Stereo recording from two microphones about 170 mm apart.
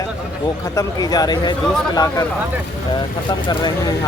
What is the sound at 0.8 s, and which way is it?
Speech, 20° left (ahead or behind).